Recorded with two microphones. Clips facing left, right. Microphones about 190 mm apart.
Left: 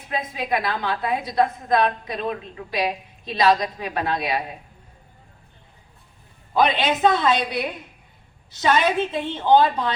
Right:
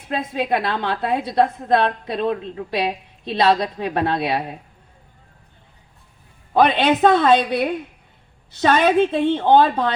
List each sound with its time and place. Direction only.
0.1 s a woman's voice: 65° right (ahead or behind)
6.5 s a woman's voice: 60° right (ahead or behind)